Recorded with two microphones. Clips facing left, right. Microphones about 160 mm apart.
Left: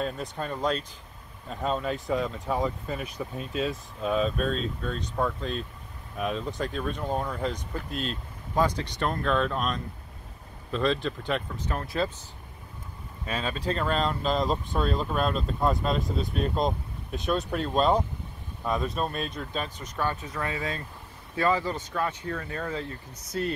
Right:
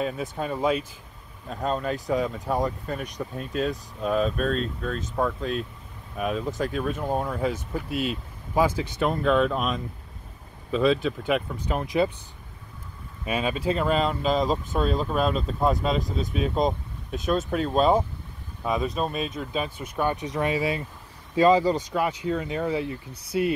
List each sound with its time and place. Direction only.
0.0 s speech: 5° right (ahead or behind)
13.2 s speech: 10° right (ahead or behind)
20.0 s speech: 15° right (ahead or behind)